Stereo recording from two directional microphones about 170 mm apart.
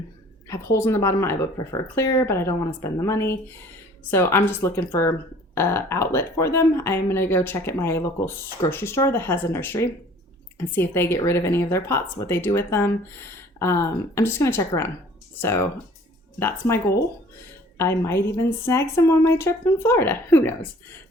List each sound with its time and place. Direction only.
0.4 s speech: 15° left (ahead or behind)